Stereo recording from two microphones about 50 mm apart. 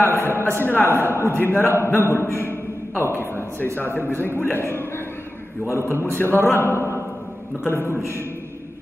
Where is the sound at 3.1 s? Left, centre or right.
Left.